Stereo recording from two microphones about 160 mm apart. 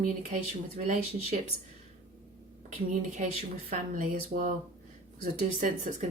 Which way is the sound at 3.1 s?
55° right (ahead or behind).